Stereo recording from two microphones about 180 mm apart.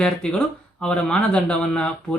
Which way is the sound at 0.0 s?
5° left (ahead or behind).